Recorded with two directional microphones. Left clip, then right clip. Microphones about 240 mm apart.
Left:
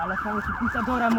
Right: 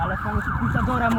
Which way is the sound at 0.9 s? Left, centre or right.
Centre.